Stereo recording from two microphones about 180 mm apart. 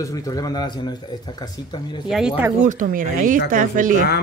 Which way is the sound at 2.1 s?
5° right (ahead or behind).